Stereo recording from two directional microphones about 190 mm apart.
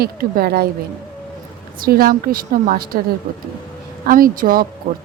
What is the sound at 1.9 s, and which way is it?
A woman's voice, 50° right (ahead or behind).